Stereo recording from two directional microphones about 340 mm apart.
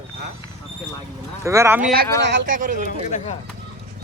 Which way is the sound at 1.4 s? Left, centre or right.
Centre.